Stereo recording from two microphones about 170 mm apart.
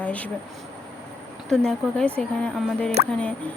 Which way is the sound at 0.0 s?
10° left (ahead or behind).